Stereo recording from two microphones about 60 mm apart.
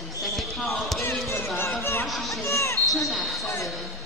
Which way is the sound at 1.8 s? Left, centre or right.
Left.